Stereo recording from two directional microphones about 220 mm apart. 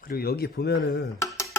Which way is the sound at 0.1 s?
45° left (ahead or behind).